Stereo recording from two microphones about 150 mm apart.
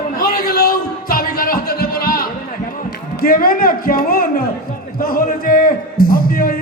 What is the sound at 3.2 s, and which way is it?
A man's voice, 75° left (ahead or behind).